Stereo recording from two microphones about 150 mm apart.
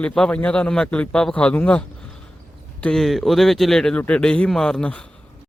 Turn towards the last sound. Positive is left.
turn(degrees=5)  # may be behind; listen again after turning